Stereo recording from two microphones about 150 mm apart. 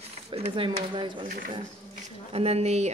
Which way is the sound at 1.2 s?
65° right (ahead or behind).